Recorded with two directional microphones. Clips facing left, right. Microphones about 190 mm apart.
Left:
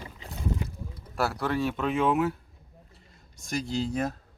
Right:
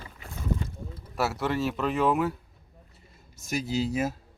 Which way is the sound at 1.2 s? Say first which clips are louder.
Even; centre (ahead or behind).